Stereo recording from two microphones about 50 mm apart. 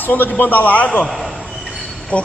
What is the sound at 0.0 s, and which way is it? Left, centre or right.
A man's voice, left.